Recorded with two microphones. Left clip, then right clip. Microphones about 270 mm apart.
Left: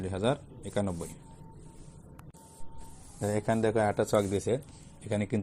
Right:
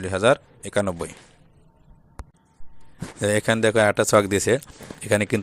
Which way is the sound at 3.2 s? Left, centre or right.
Right.